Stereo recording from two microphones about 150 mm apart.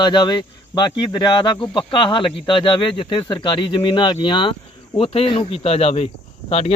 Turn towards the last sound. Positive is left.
turn(degrees=40)  # may be behind; listen again after turning